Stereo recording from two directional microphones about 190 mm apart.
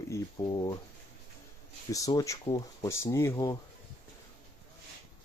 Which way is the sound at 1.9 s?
15° left (ahead or behind).